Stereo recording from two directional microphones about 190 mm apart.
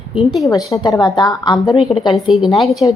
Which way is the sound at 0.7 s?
20° left (ahead or behind).